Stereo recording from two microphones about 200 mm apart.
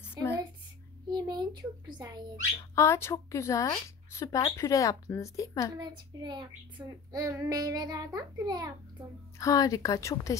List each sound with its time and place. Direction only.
0.2 s a sound: 20° right (ahead or behind)
2.7 s speech: 15° left (ahead or behind)
5.8 s a child's voice: 20° right (ahead or behind)
9.4 s speech: 15° left (ahead or behind)